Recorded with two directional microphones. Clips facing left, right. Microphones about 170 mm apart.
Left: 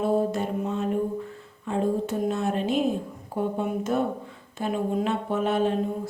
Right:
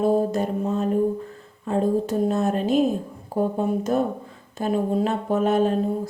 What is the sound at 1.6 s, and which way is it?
Speech, 40° right (ahead or behind).